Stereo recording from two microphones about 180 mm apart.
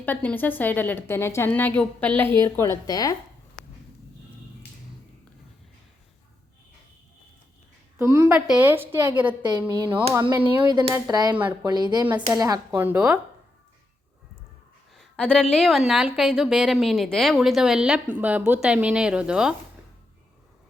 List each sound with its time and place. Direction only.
0.0 s a woman's voice: 10° left (ahead or behind)
7.9 s a woman's voice: 15° right (ahead or behind)
9.4 s a woman's voice: 25° right (ahead or behind)
11.3 s a woman's voice: 10° right (ahead or behind)
11.6 s a woman's voice: 25° right (ahead or behind)
12.8 s a woman's voice: 5° right (ahead or behind)
14.9 s a woman's voice: 5° left (ahead or behind)